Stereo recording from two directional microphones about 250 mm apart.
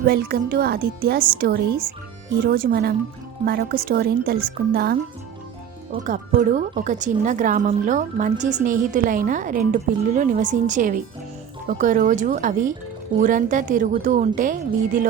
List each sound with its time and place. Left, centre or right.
0.0 s speech: right